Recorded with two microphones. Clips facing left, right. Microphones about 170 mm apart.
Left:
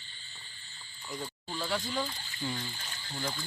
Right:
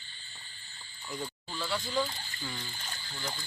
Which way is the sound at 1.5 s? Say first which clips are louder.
Left 2 dB; 20° left (ahead or behind).